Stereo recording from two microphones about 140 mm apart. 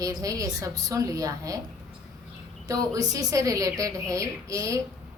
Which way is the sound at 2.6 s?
25° right (ahead or behind).